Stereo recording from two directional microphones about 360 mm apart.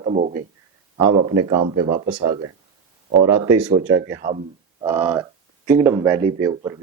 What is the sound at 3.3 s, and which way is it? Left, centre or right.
Speech, right.